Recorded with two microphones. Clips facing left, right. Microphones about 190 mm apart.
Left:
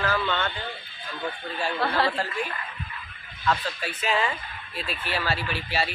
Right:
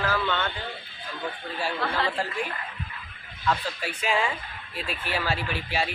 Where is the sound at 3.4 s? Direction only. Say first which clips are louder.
Left 1 dB; 10° right (ahead or behind).